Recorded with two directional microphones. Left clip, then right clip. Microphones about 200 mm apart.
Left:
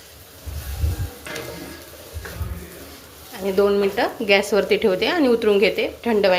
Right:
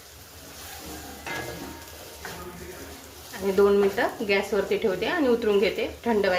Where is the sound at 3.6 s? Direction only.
15° left (ahead or behind).